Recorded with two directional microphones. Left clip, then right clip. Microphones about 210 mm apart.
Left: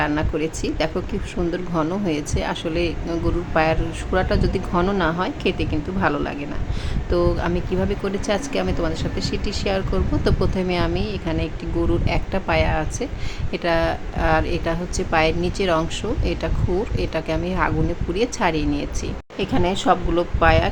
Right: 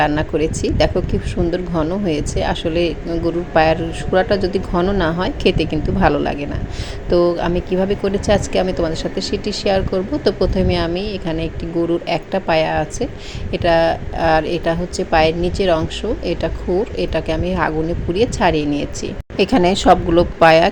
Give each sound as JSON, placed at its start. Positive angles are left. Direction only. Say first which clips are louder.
{"t": 0.0, "sound": "speech", "louder": "right 6 dB", "side_deg": -10}
{"t": 19.4, "sound": "speech", "louder": "right 8 dB", "side_deg": -20}